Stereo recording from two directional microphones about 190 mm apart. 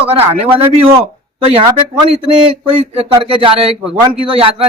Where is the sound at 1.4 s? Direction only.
30° right (ahead or behind).